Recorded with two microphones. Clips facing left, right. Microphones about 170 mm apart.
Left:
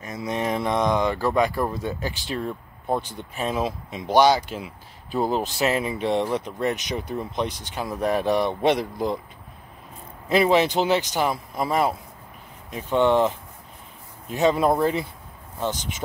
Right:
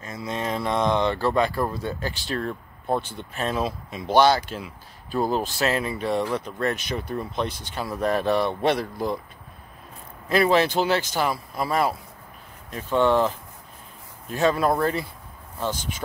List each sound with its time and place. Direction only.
0.0 s speech: 20° left (ahead or behind)
10.2 s speech: 15° left (ahead or behind)
14.3 s speech: 20° left (ahead or behind)